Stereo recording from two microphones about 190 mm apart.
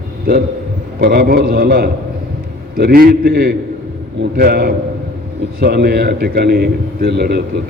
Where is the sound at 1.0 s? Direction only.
60° right (ahead or behind).